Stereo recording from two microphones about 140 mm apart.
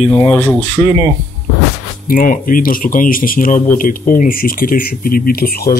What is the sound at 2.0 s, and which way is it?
Speech, 80° left.